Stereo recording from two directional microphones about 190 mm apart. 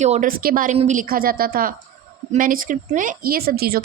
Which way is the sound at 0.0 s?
40° right (ahead or behind).